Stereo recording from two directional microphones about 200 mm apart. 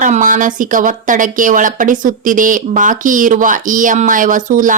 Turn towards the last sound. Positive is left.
turn(degrees=-40)  # may be behind; listen again after turning